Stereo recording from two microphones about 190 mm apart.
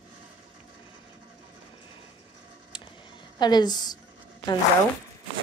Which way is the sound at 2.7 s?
25° left (ahead or behind).